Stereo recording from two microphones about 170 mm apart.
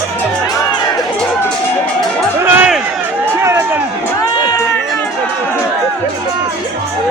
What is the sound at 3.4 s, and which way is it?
Run, 15° right (ahead or behind).